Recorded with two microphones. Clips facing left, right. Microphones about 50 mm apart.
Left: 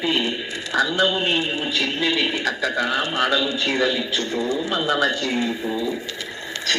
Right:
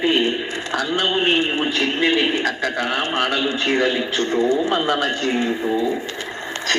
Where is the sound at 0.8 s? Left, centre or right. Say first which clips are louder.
Left 1 dB; right.